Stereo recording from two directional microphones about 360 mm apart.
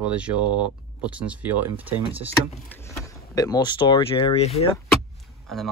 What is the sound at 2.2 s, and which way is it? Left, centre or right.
Speech, centre.